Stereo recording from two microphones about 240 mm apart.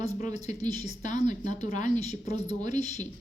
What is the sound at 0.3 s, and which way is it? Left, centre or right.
A woman's voice, left.